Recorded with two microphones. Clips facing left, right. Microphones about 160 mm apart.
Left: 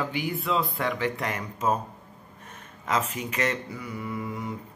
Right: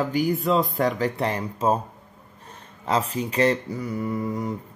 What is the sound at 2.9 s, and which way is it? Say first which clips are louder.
Speech: right 4 dB; 35° right (ahead or behind).